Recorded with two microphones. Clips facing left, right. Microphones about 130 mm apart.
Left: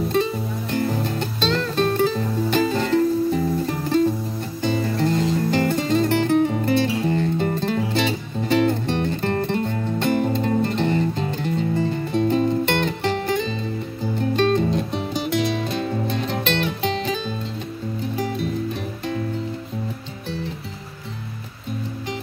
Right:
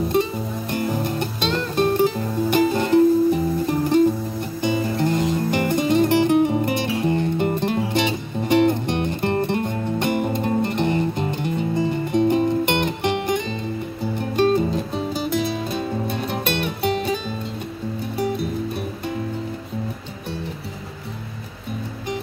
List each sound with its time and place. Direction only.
0.1 s music: 15° right (ahead or behind)